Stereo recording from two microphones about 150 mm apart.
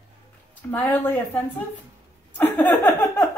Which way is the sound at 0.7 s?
15° left (ahead or behind).